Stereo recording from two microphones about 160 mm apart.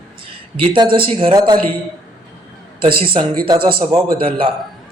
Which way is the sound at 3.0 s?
35° right (ahead or behind).